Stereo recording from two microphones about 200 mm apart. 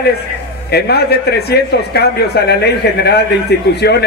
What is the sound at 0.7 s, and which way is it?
A man's voice, 55° left (ahead or behind).